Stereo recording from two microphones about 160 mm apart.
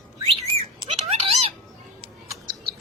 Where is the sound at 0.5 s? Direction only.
40° right (ahead or behind).